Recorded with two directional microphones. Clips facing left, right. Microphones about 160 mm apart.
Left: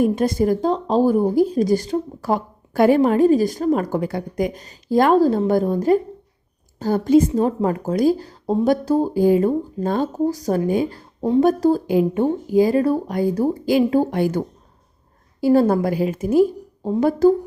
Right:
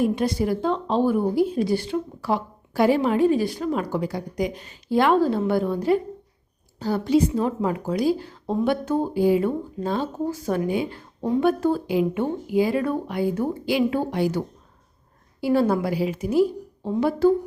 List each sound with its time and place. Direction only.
0.0 s a woman's voice: 45° left (ahead or behind)